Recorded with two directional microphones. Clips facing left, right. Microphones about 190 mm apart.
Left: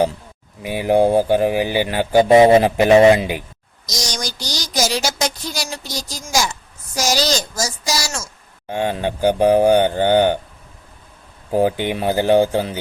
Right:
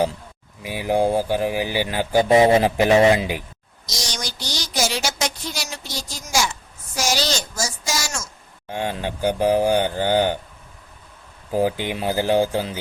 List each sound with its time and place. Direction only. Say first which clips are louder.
0.6 s speech: left 5 dB; 55° left (ahead or behind)
3.8 s a sound: left 4 dB; 40° left (ahead or behind)
9.2 s speech: left 5 dB; 60° left (ahead or behind)
11.5 s speech: left 4 dB; 60° left (ahead or behind)